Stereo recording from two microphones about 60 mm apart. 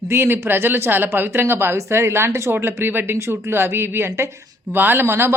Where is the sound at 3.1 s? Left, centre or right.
Right.